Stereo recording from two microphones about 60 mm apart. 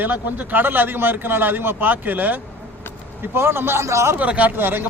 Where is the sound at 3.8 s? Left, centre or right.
Right.